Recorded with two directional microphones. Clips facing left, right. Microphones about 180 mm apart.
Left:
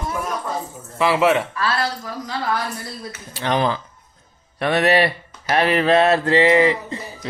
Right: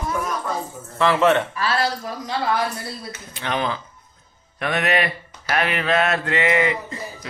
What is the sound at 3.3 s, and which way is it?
Speech, 35° left (ahead or behind).